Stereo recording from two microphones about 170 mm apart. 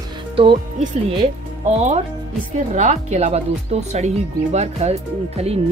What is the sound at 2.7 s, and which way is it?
Speech, 45° right (ahead or behind).